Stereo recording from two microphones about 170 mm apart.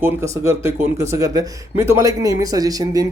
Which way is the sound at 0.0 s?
15° right (ahead or behind).